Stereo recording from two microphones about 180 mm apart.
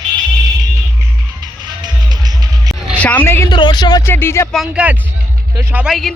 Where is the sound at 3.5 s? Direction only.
25° left (ahead or behind).